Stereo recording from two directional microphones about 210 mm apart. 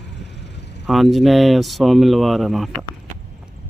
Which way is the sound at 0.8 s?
Centre (ahead or behind).